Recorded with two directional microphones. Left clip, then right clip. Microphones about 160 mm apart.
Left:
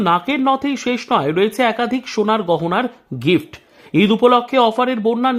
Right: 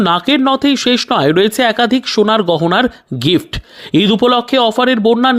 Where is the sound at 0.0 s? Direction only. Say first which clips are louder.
Right 4 dB; 40° right (ahead or behind).